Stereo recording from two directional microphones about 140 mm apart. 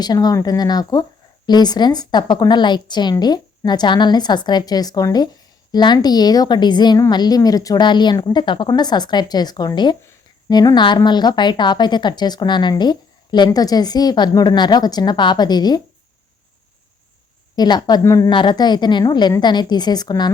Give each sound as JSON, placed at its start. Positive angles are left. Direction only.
{"t": 0.0, "sound": "a woman's voice", "side_deg": 30}
{"t": 17.6, "sound": "a woman's voice", "side_deg": 30}